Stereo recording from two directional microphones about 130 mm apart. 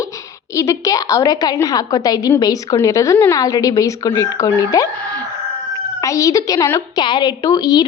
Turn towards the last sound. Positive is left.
turn(degrees=30)  # may be behind; listen again after turning